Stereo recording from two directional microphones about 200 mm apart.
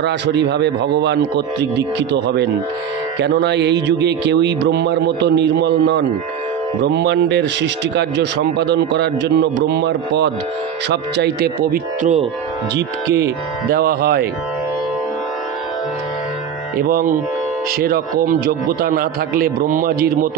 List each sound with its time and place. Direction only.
0.0 s a man's voice: 60° right (ahead or behind)
16.7 s a man's voice: 45° right (ahead or behind)